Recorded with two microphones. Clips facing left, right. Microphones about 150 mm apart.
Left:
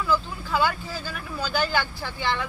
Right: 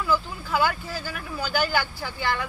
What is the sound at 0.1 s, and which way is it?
Speech, 5° right (ahead or behind).